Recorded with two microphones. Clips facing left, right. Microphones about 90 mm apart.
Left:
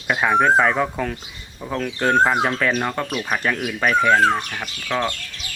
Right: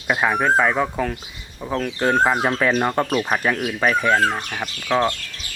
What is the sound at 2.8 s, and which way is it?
Speech, 25° right (ahead or behind).